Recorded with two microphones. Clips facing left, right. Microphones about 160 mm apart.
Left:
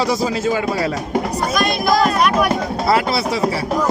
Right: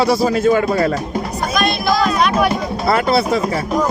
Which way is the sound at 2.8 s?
55° right (ahead or behind).